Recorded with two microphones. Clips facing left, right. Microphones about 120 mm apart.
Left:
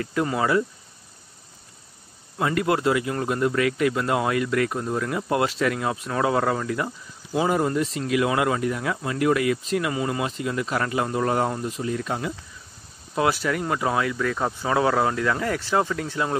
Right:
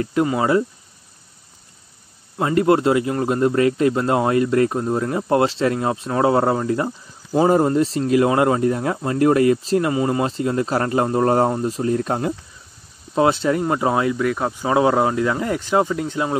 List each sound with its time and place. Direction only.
0.0 s speech: 20° right (ahead or behind)
2.3 s speech: 25° right (ahead or behind); by 12.4 s 45° right (ahead or behind)
13.1 s speech: 25° right (ahead or behind)
14.1 s speech: 10° right (ahead or behind)